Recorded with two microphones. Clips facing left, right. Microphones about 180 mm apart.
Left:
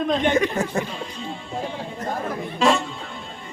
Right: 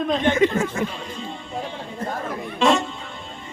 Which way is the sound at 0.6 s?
35° left (ahead or behind).